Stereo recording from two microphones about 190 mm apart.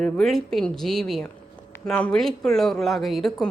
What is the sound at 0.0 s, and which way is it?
Speech, centre (ahead or behind).